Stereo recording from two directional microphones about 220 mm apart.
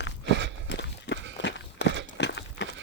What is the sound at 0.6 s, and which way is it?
Walk, 50° left (ahead or behind).